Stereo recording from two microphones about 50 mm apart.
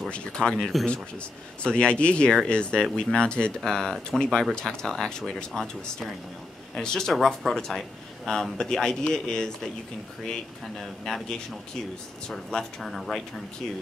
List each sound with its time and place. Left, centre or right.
0.1 s speech: centre
12.4 s speech: centre